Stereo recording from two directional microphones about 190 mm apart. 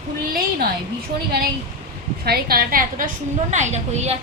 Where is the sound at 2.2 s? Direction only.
55° right (ahead or behind).